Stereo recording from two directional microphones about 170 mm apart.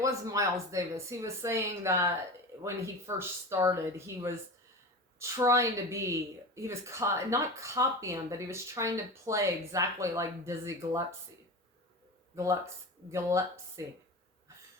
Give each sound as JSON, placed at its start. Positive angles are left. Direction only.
{"t": 0.0, "sound": "speech", "side_deg": -20}
{"t": 12.4, "sound": "speech", "side_deg": -20}